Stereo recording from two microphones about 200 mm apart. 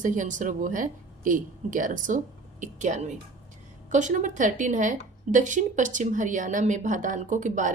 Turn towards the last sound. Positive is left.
turn(degrees=-40)  # may be behind; listen again after turning